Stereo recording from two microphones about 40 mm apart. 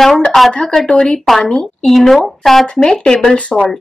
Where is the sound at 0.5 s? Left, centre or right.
Centre.